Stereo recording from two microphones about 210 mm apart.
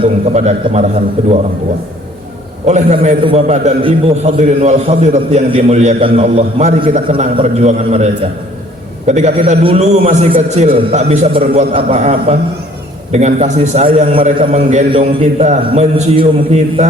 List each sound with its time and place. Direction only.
0.0 s a man's voice: 30° right (ahead or behind)
2.6 s a man's voice: 30° right (ahead or behind)